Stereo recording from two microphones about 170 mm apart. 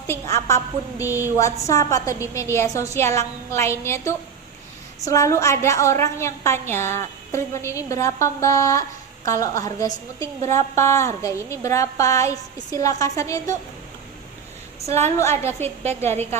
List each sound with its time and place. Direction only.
0.1 s a woman's voice: 15° left (ahead or behind)
14.9 s a woman's voice: 15° left (ahead or behind)